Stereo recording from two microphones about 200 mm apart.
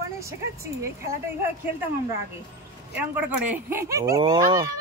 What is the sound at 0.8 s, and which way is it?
Speech, 15° right (ahead or behind).